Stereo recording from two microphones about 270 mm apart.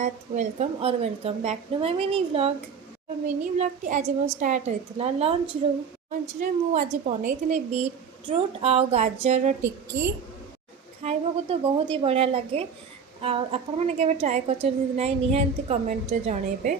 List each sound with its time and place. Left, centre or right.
0.0 s a woman's voice: right
6.4 s a woman's voice: right
11.0 s a woman's voice: right